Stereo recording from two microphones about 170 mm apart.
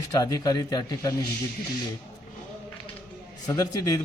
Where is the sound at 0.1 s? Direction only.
20° left (ahead or behind).